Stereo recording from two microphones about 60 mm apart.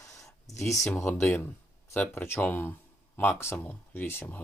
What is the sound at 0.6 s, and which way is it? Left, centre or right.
Speech, left.